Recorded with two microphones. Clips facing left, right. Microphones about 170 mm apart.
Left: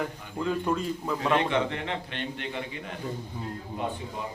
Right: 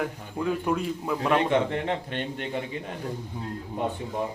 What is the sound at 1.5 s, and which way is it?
A man's voice, 40° right (ahead or behind).